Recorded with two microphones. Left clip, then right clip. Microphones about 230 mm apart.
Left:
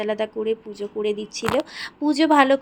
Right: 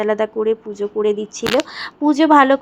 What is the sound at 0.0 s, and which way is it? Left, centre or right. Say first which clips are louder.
Speech: right 6 dB; centre.